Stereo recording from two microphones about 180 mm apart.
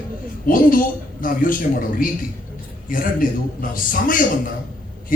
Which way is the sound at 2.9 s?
50° left (ahead or behind).